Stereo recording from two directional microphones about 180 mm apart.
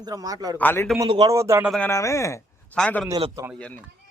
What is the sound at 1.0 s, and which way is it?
Speech, 35° right (ahead or behind).